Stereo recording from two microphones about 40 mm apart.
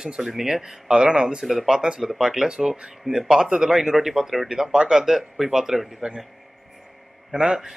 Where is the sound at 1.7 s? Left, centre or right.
Centre.